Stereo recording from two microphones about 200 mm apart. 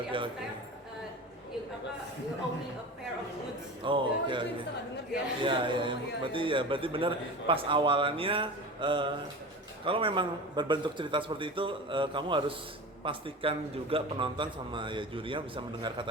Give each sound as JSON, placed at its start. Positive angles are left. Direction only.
{"t": 3.8, "sound": "music", "side_deg": -25}
{"t": 5.4, "sound": "a man's voice", "side_deg": -25}